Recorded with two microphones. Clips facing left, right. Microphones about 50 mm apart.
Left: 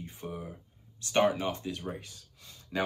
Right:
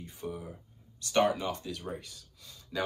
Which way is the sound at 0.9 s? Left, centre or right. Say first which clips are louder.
Left 1 dB; left.